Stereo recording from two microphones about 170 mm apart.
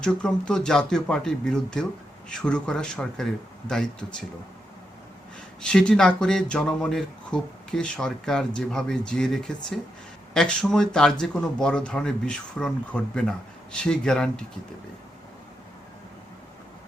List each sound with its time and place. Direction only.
0.0 s speech: 5° left (ahead or behind)
5.6 s speech: 5° left (ahead or behind)